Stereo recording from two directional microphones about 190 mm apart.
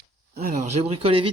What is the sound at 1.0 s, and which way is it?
Speech, 30° right (ahead or behind).